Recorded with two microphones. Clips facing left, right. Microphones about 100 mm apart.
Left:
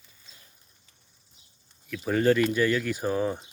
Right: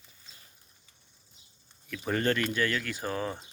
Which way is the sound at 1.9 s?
5° left (ahead or behind).